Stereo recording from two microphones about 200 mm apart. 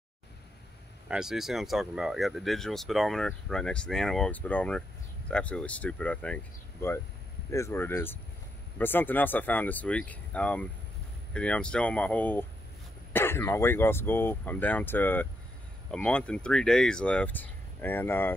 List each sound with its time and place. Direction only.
1.0 s speech: 5° right (ahead or behind)